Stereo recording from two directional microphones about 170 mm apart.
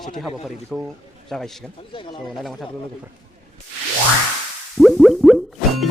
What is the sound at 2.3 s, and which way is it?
Speech, centre (ahead or behind).